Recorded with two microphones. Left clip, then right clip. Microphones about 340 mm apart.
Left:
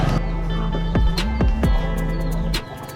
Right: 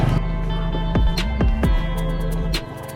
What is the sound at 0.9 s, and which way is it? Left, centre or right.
Music, centre.